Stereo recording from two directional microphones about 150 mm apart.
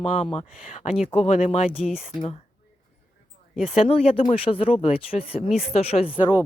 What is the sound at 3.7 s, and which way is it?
Speech, 40° left (ahead or behind).